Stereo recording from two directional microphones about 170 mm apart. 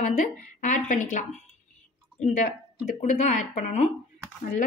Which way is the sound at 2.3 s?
50° left (ahead or behind).